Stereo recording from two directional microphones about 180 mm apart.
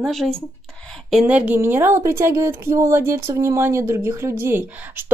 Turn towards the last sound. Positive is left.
turn(degrees=-15)  # may be behind; listen again after turning